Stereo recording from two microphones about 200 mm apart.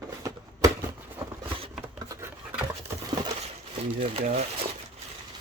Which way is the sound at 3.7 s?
25° right (ahead or behind).